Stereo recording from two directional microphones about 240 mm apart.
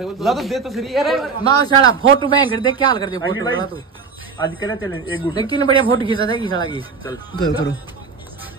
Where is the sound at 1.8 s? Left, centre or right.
Centre.